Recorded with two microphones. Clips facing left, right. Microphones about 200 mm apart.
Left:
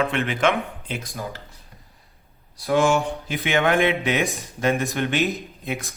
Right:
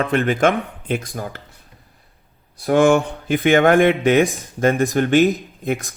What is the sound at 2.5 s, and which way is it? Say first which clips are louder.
Speech: right 5 dB; 50° right (ahead or behind).